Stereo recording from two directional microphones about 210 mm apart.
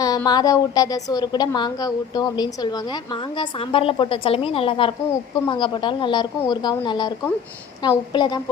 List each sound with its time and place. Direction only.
0.0 s a woman's voice: 15° left (ahead or behind)